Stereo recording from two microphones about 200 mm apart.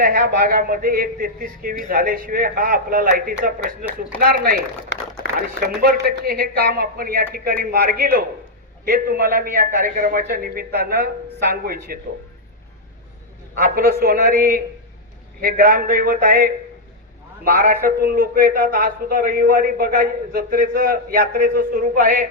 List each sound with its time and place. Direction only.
0.0 s a man's voice: 50° right (ahead or behind)
13.6 s a man's voice: 50° right (ahead or behind)